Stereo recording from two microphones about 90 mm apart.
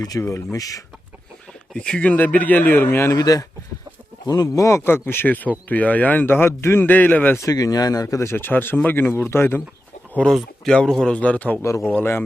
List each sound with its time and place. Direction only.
0.0 s speech: 40° left (ahead or behind)
1.7 s speech: 10° left (ahead or behind); by 3.2 s 25° left (ahead or behind)
3.2 s speech: 40° left (ahead or behind); by 7.3 s 20° left (ahead or behind)
7.3 s speech: 40° left (ahead or behind)
8.0 s speech: 30° left (ahead or behind)
10.2 s a man's voice: 10° left (ahead or behind)
11.6 s speech: 30° left (ahead or behind)